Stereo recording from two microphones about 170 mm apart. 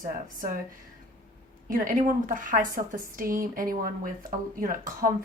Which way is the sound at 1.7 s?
55° right (ahead or behind).